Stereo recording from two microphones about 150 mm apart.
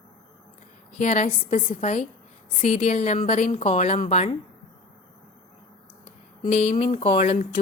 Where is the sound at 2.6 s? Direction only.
45° left (ahead or behind).